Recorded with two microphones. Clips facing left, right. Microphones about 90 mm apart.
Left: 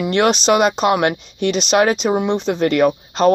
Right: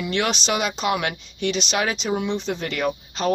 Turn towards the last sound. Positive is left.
turn(degrees=50)  # may be behind; listen again after turning